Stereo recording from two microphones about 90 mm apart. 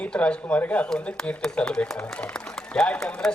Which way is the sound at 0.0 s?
15° left (ahead or behind).